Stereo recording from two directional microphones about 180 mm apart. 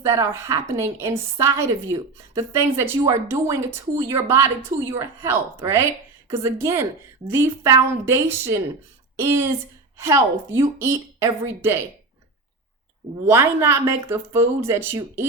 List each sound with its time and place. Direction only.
0.0 s a woman's voice: 15° right (ahead or behind)
13.2 s a woman's voice: 15° right (ahead or behind)